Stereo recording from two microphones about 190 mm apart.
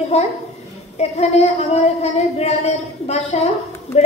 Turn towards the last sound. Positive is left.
turn(degrees=35)  # may be behind; listen again after turning